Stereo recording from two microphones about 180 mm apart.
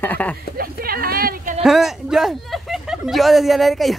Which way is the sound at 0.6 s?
55° right (ahead or behind).